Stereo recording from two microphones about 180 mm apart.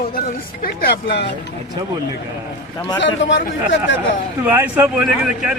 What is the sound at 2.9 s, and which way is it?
Speech, 90° left.